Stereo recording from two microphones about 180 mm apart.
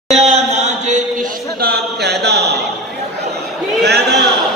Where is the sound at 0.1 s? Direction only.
35° right (ahead or behind).